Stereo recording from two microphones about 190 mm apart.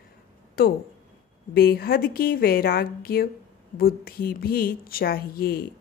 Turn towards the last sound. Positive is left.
turn(degrees=50)  # may be behind; listen again after turning